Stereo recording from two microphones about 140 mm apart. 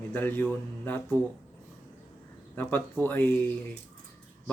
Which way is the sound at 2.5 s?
15° left (ahead or behind).